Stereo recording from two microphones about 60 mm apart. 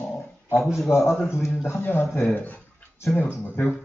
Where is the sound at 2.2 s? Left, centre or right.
Left.